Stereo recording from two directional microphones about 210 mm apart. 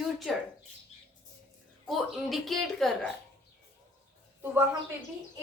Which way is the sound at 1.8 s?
Centre (ahead or behind).